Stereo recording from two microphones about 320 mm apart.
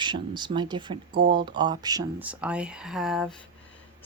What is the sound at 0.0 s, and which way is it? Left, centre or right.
Speech, centre.